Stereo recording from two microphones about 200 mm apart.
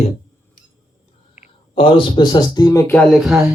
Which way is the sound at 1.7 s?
25° left (ahead or behind).